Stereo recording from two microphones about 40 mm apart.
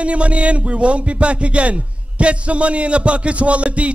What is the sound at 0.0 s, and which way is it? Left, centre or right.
A man's voice, right.